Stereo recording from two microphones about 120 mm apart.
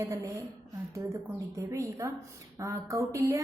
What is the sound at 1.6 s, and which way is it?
A woman's voice, 25° right (ahead or behind).